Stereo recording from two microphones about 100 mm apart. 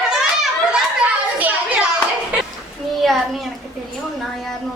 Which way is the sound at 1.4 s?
15° right (ahead or behind).